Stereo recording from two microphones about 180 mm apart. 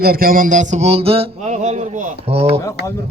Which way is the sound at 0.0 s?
55° right (ahead or behind).